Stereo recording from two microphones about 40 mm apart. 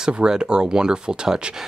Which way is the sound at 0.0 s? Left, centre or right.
Centre.